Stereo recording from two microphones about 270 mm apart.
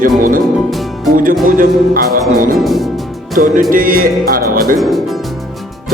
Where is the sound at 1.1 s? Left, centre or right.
Right.